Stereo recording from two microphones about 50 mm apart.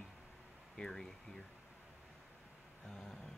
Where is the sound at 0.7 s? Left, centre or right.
Centre.